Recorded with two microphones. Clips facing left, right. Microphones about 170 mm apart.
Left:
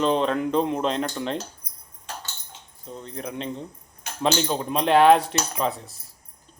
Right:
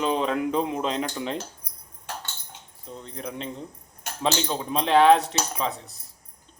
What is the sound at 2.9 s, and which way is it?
Speech, 5° left (ahead or behind).